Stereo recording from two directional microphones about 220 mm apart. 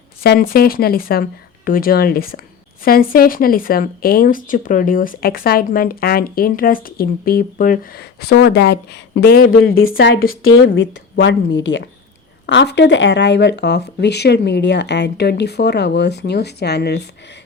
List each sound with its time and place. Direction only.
0.2 s speech: 40° left (ahead or behind)
10.4 s speech: 65° left (ahead or behind); by 17.0 s 50° left (ahead or behind)